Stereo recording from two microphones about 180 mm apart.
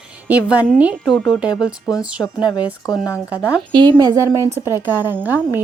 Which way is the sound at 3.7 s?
20° right (ahead or behind).